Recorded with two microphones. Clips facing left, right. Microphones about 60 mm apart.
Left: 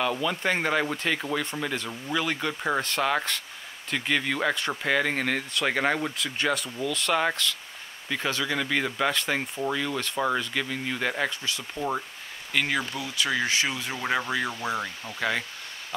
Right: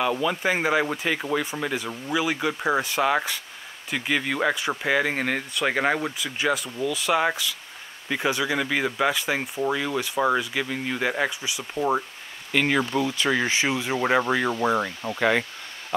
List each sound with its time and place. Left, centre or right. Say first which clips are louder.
0.0 s speech: right 3 dB; centre
12.9 s speech: right 5 dB; right
14.5 s speech: right 7 dB; right
15.1 s speech: right 6 dB; centre